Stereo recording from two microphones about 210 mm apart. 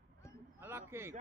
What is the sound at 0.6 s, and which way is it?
Speech, 10° right (ahead or behind).